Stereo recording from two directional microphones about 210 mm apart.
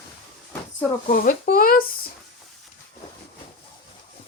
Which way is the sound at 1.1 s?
45° left (ahead or behind).